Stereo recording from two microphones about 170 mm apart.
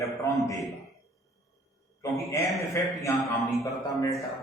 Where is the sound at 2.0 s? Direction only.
20° left (ahead or behind).